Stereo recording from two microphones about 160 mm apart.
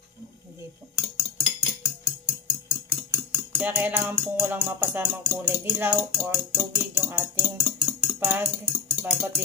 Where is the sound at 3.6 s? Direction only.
10° right (ahead or behind).